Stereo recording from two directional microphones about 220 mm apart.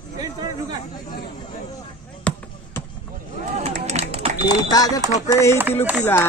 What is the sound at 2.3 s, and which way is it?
Basketball bounce, 5° left (ahead or behind).